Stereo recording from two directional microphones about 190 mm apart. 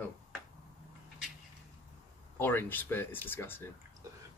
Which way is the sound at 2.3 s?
10° left (ahead or behind).